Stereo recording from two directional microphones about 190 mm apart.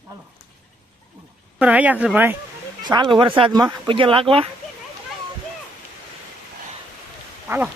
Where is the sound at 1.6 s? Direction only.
5° right (ahead or behind).